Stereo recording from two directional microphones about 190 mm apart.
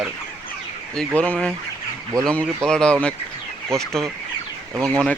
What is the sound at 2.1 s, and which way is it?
Speech, 20° right (ahead or behind).